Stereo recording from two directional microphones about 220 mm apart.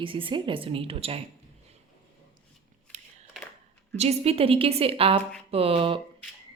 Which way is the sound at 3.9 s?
30° right (ahead or behind).